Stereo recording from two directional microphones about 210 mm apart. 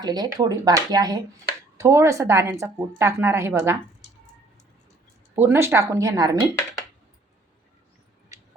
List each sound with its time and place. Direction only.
0.0 s speech: 20° right (ahead or behind)
5.3 s speech: 10° right (ahead or behind)